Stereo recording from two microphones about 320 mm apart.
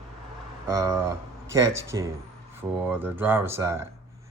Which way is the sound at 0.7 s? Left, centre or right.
Centre.